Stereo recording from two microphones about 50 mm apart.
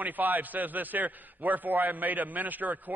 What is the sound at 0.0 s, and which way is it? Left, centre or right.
A man's voice, right.